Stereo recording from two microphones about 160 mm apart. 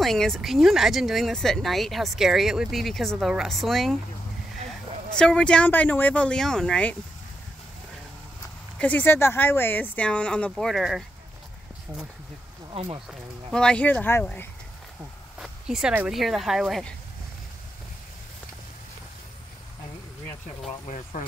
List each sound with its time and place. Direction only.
0.0 s speech: centre (ahead or behind)
5.1 s speech: 5° left (ahead or behind)
8.7 s speech: 10° left (ahead or behind)
12.7 s speech: 30° right (ahead or behind)
13.5 s speech: 5° left (ahead or behind)
15.3 s speech: 5° right (ahead or behind)